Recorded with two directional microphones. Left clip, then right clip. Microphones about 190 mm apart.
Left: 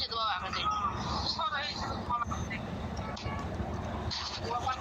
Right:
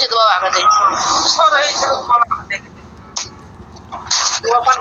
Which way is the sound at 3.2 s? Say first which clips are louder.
Right 16 dB; 55° right (ahead or behind).